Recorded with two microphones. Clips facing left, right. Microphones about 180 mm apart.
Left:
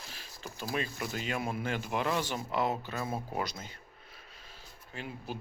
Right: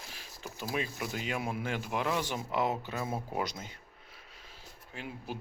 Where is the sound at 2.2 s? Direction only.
15° right (ahead or behind).